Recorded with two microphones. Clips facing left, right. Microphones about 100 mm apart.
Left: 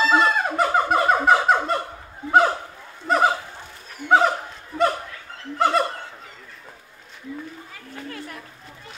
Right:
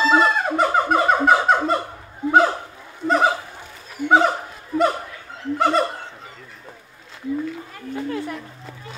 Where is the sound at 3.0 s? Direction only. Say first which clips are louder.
Right 1 dB; centre (ahead or behind).